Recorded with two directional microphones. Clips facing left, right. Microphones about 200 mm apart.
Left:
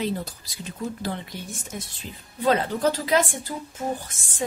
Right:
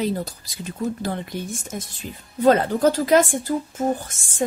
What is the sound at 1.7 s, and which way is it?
Speech, 45° right (ahead or behind).